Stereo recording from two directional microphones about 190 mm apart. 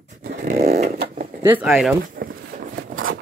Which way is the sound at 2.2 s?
50° right (ahead or behind).